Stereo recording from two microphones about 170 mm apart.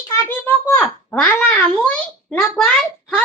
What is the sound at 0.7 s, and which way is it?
Speech, 10° left (ahead or behind).